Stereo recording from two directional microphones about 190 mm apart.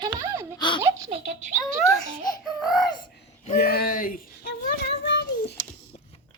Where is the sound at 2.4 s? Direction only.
Centre (ahead or behind).